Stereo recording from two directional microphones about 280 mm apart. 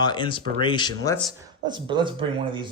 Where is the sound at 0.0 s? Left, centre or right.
Centre.